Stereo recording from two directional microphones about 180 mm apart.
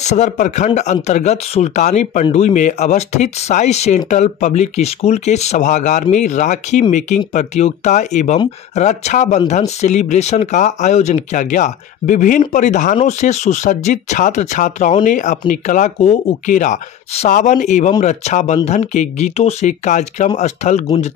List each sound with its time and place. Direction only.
0.0 s speech: 40° left (ahead or behind)